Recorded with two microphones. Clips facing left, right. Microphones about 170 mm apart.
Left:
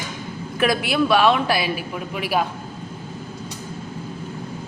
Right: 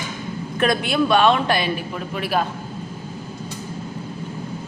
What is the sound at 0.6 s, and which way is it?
A man's voice, 5° left (ahead or behind).